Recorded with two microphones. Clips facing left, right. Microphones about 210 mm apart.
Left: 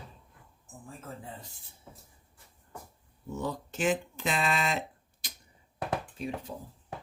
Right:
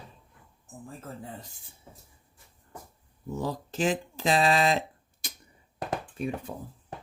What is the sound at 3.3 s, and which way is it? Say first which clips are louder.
Speech: right 3 dB; 35° right (ahead or behind).